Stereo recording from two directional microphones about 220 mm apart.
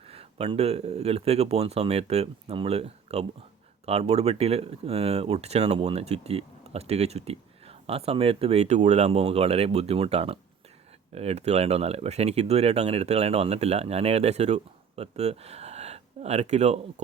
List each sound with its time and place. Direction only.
0.1 s speech: 25° right (ahead or behind)